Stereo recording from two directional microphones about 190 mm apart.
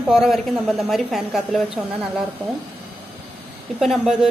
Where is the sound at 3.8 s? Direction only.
Centre (ahead or behind).